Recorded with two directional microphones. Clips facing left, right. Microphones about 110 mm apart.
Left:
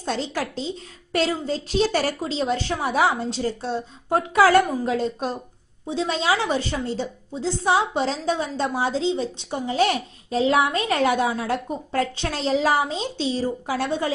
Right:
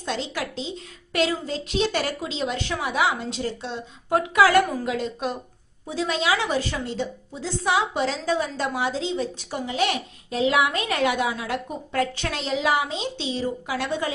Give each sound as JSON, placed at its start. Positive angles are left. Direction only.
{"t": 0.0, "sound": "a woman's voice", "side_deg": 35}